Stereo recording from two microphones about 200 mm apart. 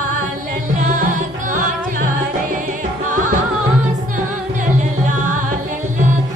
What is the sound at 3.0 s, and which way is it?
Music, 40° right (ahead or behind).